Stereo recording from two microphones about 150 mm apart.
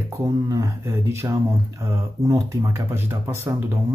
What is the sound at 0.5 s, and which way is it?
Speech, 20° right (ahead or behind).